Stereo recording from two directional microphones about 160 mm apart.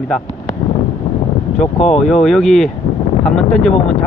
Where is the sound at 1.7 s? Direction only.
45° left (ahead or behind).